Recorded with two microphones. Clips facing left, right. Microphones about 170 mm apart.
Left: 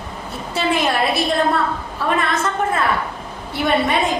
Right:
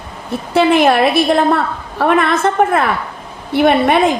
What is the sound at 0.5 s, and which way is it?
Speech, 60° right (ahead or behind).